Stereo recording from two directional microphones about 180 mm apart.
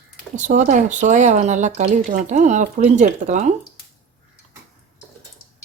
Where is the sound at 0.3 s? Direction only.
45° right (ahead or behind).